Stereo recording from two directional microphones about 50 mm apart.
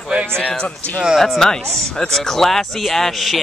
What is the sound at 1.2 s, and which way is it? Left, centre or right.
Speech, centre.